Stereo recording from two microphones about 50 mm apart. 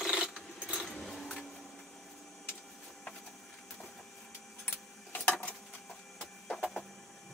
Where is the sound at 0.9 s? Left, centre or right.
Centre.